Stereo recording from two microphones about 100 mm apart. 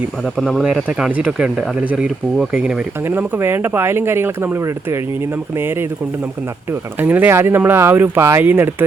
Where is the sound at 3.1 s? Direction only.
20° right (ahead or behind).